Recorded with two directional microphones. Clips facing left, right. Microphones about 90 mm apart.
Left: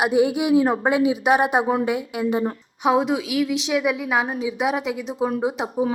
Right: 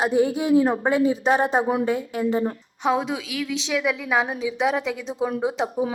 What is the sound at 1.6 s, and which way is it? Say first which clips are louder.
Speech: left 1 dB; 35° left (ahead or behind).